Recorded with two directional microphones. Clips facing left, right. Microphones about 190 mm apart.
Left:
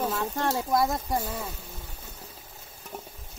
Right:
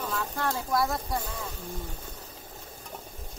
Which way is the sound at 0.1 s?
25° left (ahead or behind).